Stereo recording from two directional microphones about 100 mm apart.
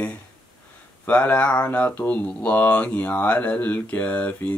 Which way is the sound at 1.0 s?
15° left (ahead or behind).